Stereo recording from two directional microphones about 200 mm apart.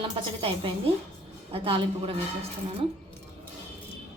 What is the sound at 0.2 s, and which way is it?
Speech, 30° right (ahead or behind).